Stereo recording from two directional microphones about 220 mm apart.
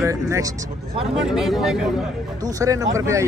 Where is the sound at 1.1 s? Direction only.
Centre (ahead or behind).